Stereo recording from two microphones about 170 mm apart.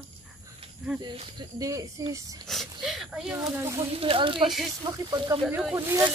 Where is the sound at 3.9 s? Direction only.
35° right (ahead or behind); by 6.1 s 15° right (ahead or behind).